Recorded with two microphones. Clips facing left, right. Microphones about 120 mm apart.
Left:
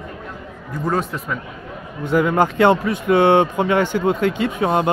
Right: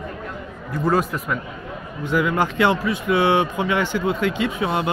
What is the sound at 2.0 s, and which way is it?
Speech, 45° left (ahead or behind).